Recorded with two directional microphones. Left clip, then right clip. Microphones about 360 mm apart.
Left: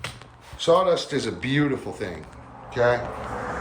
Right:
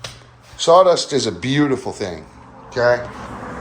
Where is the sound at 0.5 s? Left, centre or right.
Centre.